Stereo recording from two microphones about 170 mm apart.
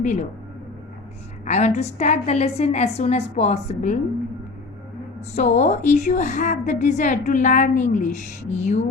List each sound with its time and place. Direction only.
0.0 s a woman's voice: 45° left (ahead or behind)
1.5 s a woman's voice: 45° left (ahead or behind)
5.3 s a woman's voice: 45° left (ahead or behind)